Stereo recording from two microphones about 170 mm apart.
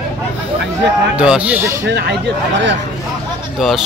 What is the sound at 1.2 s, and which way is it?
Speech, 5° right (ahead or behind).